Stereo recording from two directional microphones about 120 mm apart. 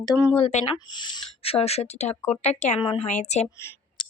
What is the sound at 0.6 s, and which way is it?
Speech, 40° left (ahead or behind).